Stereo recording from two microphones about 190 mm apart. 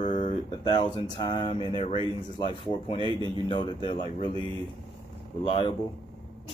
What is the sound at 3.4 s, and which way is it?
Speech, 25° left (ahead or behind).